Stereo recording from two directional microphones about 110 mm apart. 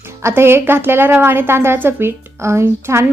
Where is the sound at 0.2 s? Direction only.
25° right (ahead or behind).